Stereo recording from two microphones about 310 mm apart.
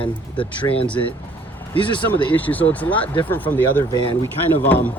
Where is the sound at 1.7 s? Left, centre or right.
Centre.